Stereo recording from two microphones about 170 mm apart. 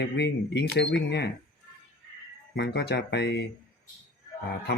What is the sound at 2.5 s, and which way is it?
Speech, 85° left.